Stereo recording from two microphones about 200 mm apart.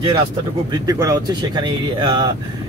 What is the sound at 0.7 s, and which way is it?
Speech, 15° right (ahead or behind).